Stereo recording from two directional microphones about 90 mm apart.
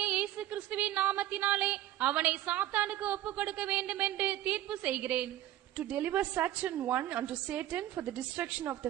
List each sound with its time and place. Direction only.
0.0 s speech: 15° right (ahead or behind)